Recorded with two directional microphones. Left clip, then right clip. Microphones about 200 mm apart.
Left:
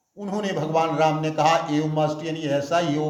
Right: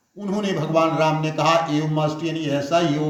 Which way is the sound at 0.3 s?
25° left (ahead or behind).